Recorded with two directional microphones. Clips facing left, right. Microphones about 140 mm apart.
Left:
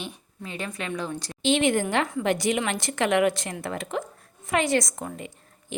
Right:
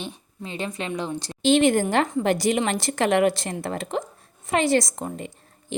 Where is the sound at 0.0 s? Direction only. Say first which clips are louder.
Right 2 dB; 30° right (ahead or behind).